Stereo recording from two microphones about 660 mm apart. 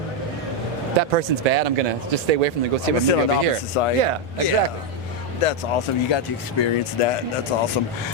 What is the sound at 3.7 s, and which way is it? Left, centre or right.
Speech, left.